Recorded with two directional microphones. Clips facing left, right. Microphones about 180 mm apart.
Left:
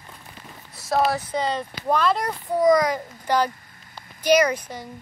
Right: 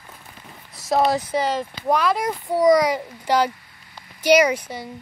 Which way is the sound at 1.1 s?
15° right (ahead or behind).